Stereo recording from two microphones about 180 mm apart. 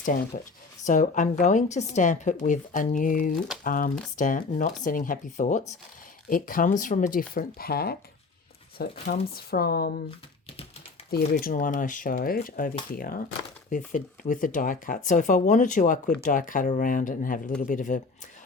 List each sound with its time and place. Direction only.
0.3 s speech: 40° left (ahead or behind); by 10.0 s 60° left (ahead or behind)
11.1 s speech: 55° left (ahead or behind)